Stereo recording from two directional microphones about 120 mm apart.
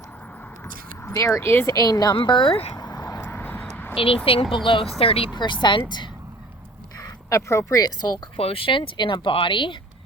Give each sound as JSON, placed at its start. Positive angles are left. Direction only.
{"t": 1.0, "sound": "speech", "side_deg": 25}
{"t": 2.7, "sound": "a sound", "side_deg": 30}
{"t": 3.2, "sound": "vehicle", "side_deg": 15}
{"t": 3.7, "sound": "a sound", "side_deg": 15}
{"t": 3.9, "sound": "speech", "side_deg": 50}
{"t": 7.0, "sound": "speech", "side_deg": 25}
{"t": 8.4, "sound": "speech", "side_deg": 50}